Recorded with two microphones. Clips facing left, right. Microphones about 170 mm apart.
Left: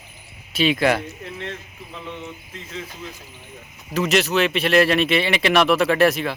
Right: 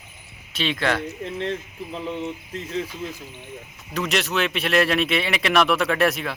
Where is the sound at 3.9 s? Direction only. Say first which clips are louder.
Left 5 dB; centre (ahead or behind).